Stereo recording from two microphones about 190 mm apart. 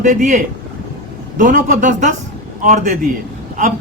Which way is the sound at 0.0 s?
40° right (ahead or behind).